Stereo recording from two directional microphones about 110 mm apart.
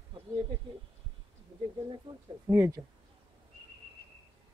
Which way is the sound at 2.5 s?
20° right (ahead or behind).